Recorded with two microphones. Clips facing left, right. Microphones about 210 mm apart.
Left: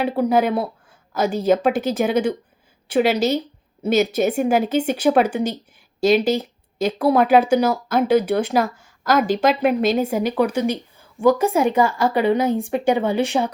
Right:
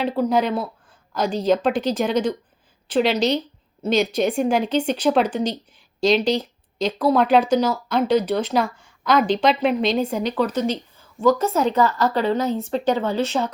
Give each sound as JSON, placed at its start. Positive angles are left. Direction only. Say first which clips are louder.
{"t": 0.0, "sound": "a woman's voice", "louder": "left 2 dB", "side_deg": 10}
{"t": 9.2, "sound": "a woman's voice", "louder": "left 1 dB", "side_deg": 45}
{"t": 9.6, "sound": "a woman's voice", "louder": "left 2 dB", "side_deg": 10}